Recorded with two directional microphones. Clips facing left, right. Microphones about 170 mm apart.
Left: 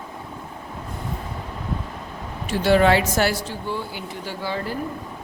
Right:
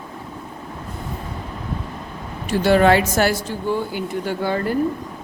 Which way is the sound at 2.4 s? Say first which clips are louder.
Right 2 dB; 50° right (ahead or behind).